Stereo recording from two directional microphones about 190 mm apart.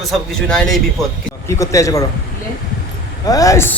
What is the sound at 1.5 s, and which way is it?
Speech, 15° left (ahead or behind).